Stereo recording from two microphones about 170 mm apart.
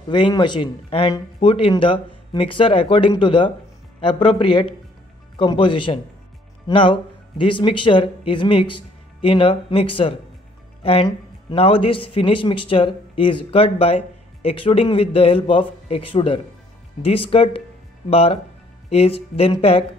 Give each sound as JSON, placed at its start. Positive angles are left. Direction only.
{"t": 0.1, "sound": "a man's voice", "side_deg": 25}